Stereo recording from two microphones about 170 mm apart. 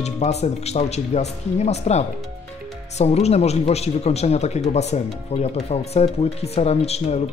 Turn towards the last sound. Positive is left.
turn(degrees=40)  # may be behind; listen again after turning